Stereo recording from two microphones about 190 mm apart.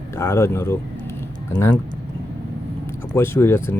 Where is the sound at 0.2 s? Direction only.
15° left (ahead or behind).